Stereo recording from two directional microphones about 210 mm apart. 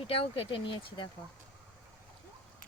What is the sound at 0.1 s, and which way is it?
Speech, 25° left (ahead or behind).